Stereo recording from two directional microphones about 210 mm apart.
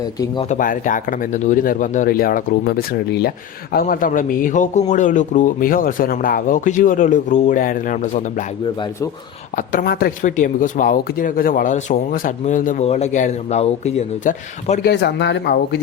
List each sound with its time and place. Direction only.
0.4 s speech: 40° left (ahead or behind)
9.6 s speech: 45° left (ahead or behind)
14.8 s speech: 55° left (ahead or behind)